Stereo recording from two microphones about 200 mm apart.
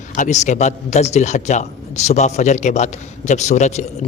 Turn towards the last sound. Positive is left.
turn(degrees=35)  # may be behind; listen again after turning